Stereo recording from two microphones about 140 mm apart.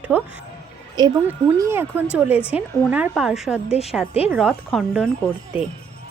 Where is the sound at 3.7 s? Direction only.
45° left (ahead or behind).